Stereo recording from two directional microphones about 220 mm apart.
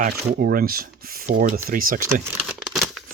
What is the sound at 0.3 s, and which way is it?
Speech, 40° right (ahead or behind).